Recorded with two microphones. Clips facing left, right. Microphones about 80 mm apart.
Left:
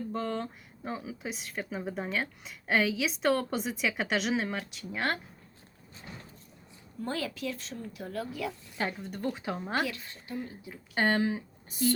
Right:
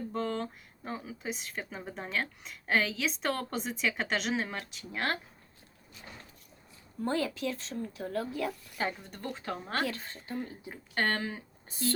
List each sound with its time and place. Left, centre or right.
0.1 s speech: centre
7.0 s a woman's voice: right
8.8 s speech: centre
9.8 s a woman's voice: right
10.9 s speech: centre